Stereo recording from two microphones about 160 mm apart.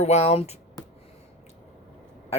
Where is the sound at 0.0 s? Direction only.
40° left (ahead or behind).